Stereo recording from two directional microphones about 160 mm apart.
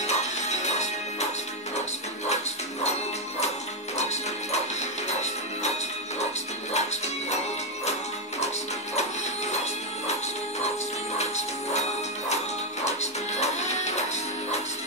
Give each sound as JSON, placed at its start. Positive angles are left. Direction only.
{"t": 0.0, "sound": "music", "side_deg": 45}
{"t": 3.9, "sound": "music", "side_deg": 45}
{"t": 6.7, "sound": "music", "side_deg": 45}
{"t": 11.1, "sound": "music", "side_deg": 45}
{"t": 12.8, "sound": "music", "side_deg": 45}